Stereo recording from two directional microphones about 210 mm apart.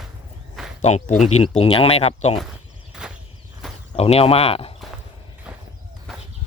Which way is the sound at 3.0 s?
5° right (ahead or behind).